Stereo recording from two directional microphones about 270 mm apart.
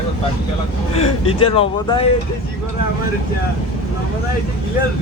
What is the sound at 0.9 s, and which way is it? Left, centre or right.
Speech, left.